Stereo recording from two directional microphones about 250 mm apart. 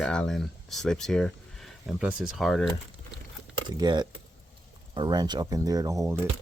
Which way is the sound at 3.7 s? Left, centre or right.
Centre.